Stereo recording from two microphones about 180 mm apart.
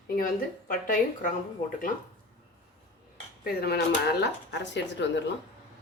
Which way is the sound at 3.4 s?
60° left (ahead or behind).